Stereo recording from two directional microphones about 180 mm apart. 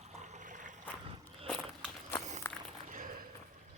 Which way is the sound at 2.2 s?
40° right (ahead or behind).